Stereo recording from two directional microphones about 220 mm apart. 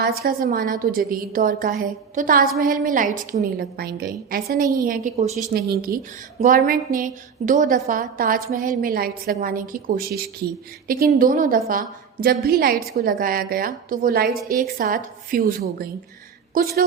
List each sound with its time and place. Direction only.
0.0 s a woman's voice: 40° right (ahead or behind)
5.5 s a woman's voice: 45° right (ahead or behind)